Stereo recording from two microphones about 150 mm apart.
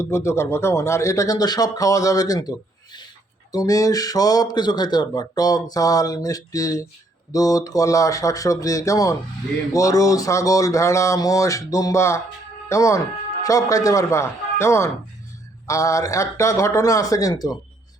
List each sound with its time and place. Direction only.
0.0 s speech: 20° left (ahead or behind)